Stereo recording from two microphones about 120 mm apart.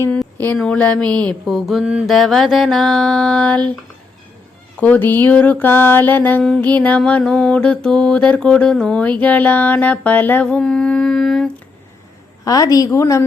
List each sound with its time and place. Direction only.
0.3 s mantra: 15° left (ahead or behind)
1.5 s a sound: centre (ahead or behind)
4.8 s mantra: 15° left (ahead or behind)
12.5 s a woman's voice: 30° left (ahead or behind)